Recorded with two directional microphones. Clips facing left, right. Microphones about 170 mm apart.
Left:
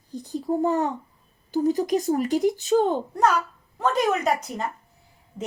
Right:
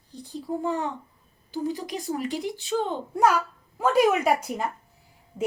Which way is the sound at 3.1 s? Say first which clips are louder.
Even; 10° right (ahead or behind).